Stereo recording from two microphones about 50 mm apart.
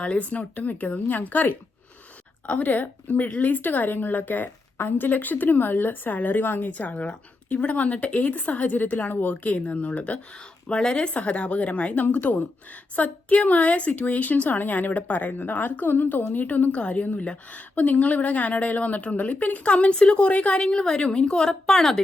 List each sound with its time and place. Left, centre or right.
0.0 s a woman's voice: left
10.7 s a woman's voice: centre
20.7 s a woman's voice: centre